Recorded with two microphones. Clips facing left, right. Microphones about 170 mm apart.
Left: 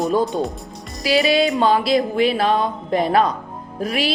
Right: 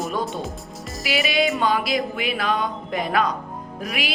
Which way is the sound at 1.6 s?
30° left (ahead or behind).